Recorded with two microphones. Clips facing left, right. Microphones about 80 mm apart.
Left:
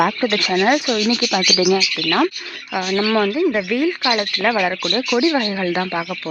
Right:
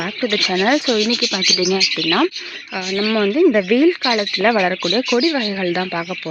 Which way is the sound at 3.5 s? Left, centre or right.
Centre.